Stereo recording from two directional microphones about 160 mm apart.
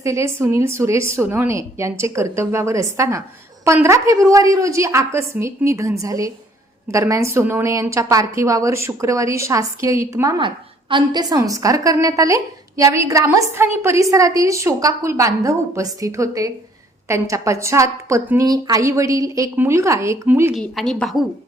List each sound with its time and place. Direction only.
0.0 s a woman's voice: 20° right (ahead or behind)
10.3 s a woman's voice: 30° right (ahead or behind); by 20.5 s 15° right (ahead or behind)
20.5 s a woman's voice: centre (ahead or behind)